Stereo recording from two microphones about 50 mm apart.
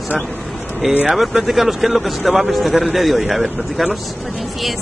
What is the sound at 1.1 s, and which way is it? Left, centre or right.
A man's voice, centre.